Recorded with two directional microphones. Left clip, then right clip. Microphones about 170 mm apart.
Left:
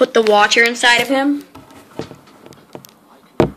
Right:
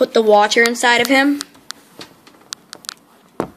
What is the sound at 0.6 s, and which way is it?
Speech, 15° right (ahead or behind).